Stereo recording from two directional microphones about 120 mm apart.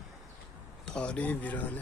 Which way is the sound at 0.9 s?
10° left (ahead or behind).